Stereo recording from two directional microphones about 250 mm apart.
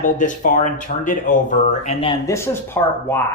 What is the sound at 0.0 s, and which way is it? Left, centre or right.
Speech, left.